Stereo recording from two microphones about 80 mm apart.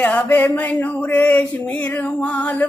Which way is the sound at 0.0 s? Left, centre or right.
Centre.